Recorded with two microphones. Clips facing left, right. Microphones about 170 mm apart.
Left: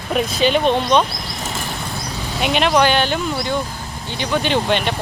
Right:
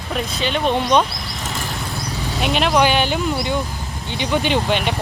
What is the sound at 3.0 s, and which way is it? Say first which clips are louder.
Speech: even; 15° right (ahead or behind).